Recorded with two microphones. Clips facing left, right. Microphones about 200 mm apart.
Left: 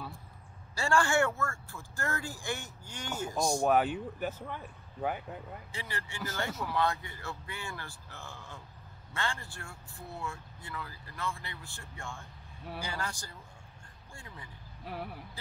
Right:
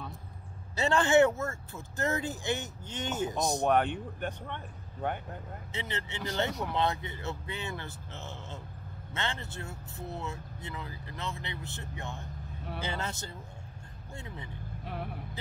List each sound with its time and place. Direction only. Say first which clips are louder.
0.7 s speech: right 4 dB; 20° right (ahead or behind)
3.6 s speech: right 1 dB; 5° left (ahead or behind)
5.7 s speech: right 6 dB; 20° right (ahead or behind)
14.9 s speech: right 1 dB; centre (ahead or behind)